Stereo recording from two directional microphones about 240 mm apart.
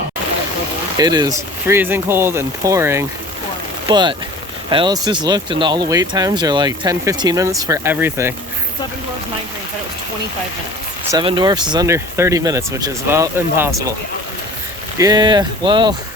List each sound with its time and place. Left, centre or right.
0.9 s speech: centre
11.1 s speech: centre
14.9 s speech: centre